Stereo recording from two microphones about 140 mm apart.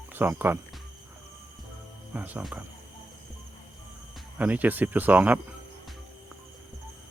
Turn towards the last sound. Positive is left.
turn(degrees=-10)  # may be behind; listen again after turning